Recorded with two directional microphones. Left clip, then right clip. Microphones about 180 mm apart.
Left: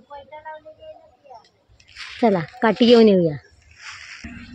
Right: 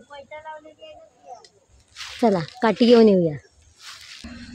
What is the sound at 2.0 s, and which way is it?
Squish, centre (ahead or behind).